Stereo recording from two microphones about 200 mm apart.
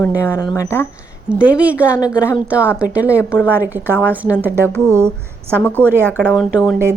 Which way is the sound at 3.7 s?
10° right (ahead or behind).